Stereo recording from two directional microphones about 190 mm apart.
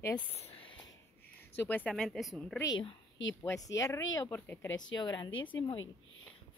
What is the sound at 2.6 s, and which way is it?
A woman's voice, 20° left (ahead or behind).